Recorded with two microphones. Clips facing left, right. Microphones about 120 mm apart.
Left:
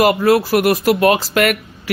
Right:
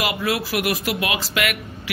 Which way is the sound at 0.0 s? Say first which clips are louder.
Left 11 dB; 45° left (ahead or behind).